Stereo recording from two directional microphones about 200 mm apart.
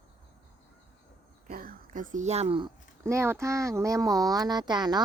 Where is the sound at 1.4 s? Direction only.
45° right (ahead or behind); by 2.7 s 25° right (ahead or behind).